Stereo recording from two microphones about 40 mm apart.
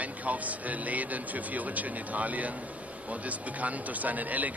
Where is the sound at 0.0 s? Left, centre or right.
Right.